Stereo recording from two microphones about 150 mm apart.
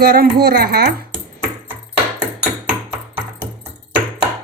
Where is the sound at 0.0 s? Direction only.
90° right.